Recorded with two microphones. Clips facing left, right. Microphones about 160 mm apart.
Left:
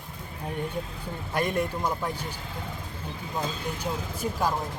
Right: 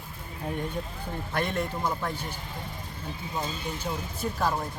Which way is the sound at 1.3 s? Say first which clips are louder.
Left 3 dB; 10° left (ahead or behind).